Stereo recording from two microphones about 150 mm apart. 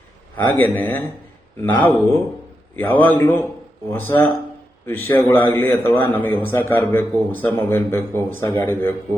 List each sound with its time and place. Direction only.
0.3 s a man's voice: 15° left (ahead or behind)